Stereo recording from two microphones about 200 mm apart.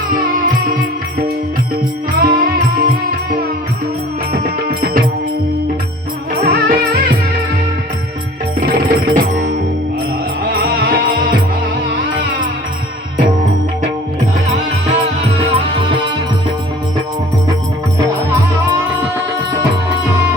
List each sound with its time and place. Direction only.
0.1 s music: 45° right (ahead or behind)
2.1 s music: 45° right (ahead or behind)
4.3 s music: 50° right (ahead or behind)
6.4 s music: 50° right (ahead or behind)
8.6 s music: 45° right (ahead or behind)
10.5 s music: 50° right (ahead or behind)
14.8 s music: 30° right (ahead or behind)